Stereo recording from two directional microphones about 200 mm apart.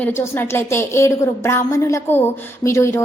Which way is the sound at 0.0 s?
10° left (ahead or behind).